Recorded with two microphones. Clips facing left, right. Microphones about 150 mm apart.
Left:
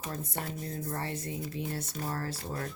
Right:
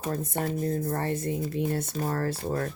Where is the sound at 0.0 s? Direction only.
50° right (ahead or behind).